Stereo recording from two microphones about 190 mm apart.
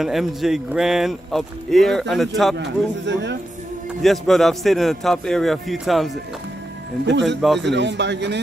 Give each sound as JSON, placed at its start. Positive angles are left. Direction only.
{"t": 0.0, "sound": "speech", "side_deg": 0}
{"t": 2.5, "sound": "a man's voice", "side_deg": -70}
{"t": 4.0, "sound": "speech", "side_deg": 0}
{"t": 7.1, "sound": "a man's voice", "side_deg": -70}
{"t": 7.4, "sound": "speech", "side_deg": 0}
{"t": 7.7, "sound": "a man's voice", "side_deg": -70}